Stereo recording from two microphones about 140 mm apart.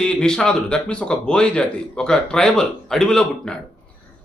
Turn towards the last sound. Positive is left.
turn(degrees=5)  # may be behind; listen again after turning